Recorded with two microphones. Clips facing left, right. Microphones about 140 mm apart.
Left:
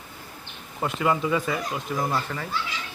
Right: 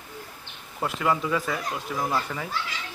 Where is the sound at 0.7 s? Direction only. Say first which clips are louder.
Left 1 dB; centre (ahead or behind).